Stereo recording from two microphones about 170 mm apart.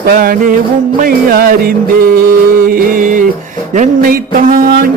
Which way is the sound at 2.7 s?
50° right (ahead or behind).